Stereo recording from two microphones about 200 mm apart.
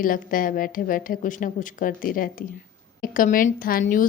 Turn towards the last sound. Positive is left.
turn(degrees=45)  # may be behind; listen again after turning